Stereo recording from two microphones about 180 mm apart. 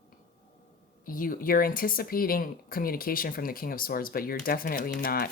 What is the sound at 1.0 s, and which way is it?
Speech, 50° left (ahead or behind).